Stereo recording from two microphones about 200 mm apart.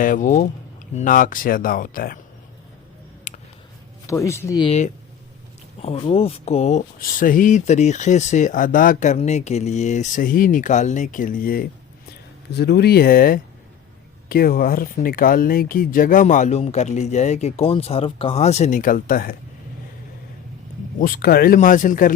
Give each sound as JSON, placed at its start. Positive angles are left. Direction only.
{"t": 0.0, "sound": "speech", "side_deg": 40}
{"t": 3.3, "sound": "a sound", "side_deg": 40}
{"t": 4.0, "sound": "speech", "side_deg": 15}
{"t": 4.6, "sound": "speech", "side_deg": 35}
{"t": 21.0, "sound": "speech", "side_deg": 45}